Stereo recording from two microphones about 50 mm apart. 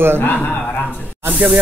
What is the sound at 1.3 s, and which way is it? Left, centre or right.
Speech, right.